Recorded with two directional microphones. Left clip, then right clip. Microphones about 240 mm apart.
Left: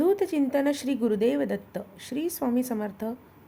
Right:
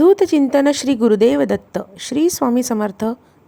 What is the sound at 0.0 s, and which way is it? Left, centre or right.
A woman's voice, right.